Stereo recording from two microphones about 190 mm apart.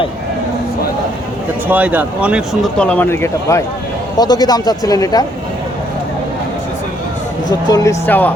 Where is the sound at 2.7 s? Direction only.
5° left (ahead or behind).